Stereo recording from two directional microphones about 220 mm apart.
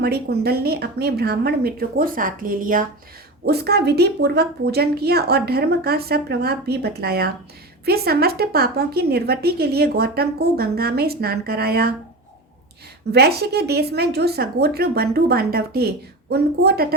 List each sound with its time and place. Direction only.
0.0 s a woman's voice: 45° right (ahead or behind)
13.1 s a woman's voice: 45° right (ahead or behind)